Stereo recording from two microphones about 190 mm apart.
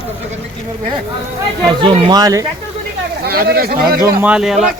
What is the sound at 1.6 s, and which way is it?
Speech, 25° right (ahead or behind).